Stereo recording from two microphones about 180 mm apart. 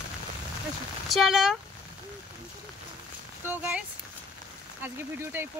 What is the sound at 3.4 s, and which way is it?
Speech, 10° right (ahead or behind).